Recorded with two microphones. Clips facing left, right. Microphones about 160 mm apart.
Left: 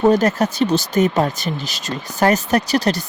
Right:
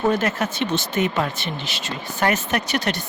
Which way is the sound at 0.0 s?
40° left (ahead or behind).